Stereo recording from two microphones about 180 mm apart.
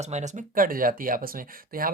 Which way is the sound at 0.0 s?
40° right (ahead or behind).